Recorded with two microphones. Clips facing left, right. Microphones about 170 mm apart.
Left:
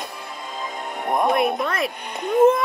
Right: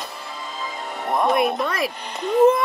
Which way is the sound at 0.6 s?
55° left (ahead or behind).